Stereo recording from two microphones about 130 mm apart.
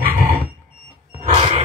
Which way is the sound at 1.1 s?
45° right (ahead or behind).